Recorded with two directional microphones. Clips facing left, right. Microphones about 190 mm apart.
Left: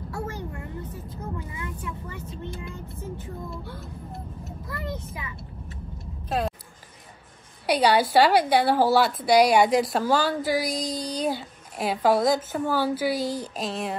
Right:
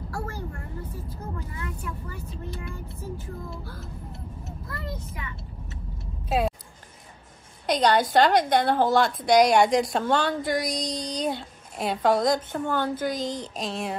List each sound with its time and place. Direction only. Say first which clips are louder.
1.6 s speech: even; 25° left (ahead or behind)
4.6 s speech: left 3 dB; 25° left (ahead or behind)
6.2 s a sound: right 2 dB; 5° right (ahead or behind)
7.6 s a woman's voice: left 1 dB; 10° left (ahead or behind)